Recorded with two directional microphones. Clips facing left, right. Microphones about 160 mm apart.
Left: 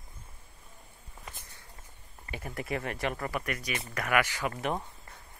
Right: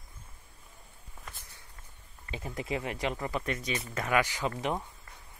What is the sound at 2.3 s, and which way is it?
Speech, 20° right (ahead or behind).